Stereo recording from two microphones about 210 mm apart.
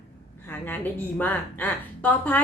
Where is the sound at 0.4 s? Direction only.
10° left (ahead or behind).